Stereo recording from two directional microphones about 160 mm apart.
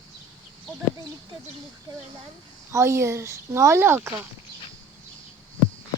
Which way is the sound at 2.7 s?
20° right (ahead or behind).